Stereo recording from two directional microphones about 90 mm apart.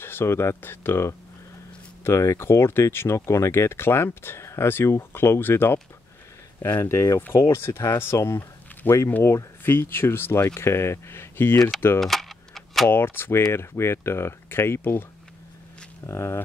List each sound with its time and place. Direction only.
0.0 s speech: 25° left (ahead or behind)
6.8 s speech: 35° left (ahead or behind)
12.0 s typing: centre (ahead or behind)
12.9 s speech: 25° left (ahead or behind)
16.1 s speech: 30° left (ahead or behind)